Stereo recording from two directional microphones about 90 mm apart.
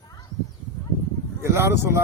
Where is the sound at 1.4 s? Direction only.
30° right (ahead or behind).